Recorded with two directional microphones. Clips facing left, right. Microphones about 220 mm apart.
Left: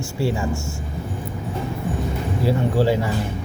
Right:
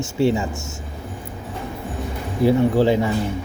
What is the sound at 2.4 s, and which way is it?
Speech, 20° right (ahead or behind).